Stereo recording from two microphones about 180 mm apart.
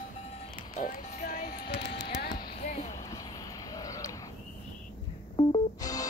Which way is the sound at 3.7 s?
20° left (ahead or behind).